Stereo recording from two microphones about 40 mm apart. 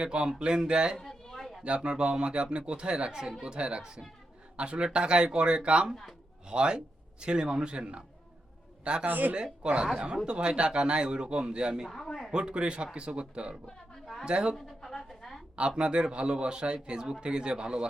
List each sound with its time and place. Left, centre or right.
0.0 s speech: right
1.3 s a sound: centre
1.6 s a man's voice: right
9.0 s speech: right
9.3 s speech: right
11.9 s a man's voice: centre
12.3 s speech: right
14.5 s a sound: centre
15.5 s speech: right